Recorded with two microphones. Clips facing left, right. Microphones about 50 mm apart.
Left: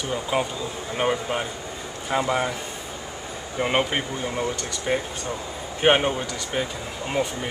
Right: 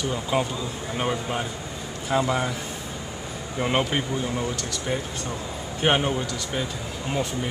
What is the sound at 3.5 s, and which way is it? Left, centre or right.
Speech, centre.